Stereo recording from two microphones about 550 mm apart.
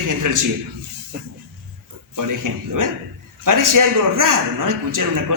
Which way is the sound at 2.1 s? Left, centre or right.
Right.